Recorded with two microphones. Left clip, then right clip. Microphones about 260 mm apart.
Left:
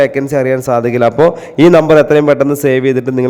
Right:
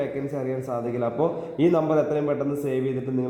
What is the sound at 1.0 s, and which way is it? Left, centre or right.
A man's voice, left.